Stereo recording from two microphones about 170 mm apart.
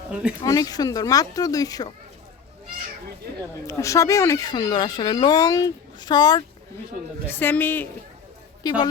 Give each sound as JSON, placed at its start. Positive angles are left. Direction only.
{"t": 0.1, "sound": "speech", "side_deg": -5}
{"t": 0.4, "sound": "speech", "side_deg": 20}
{"t": 3.7, "sound": "speech", "side_deg": 20}
{"t": 7.3, "sound": "a man's voice", "side_deg": 10}
{"t": 8.6, "sound": "speech", "side_deg": 25}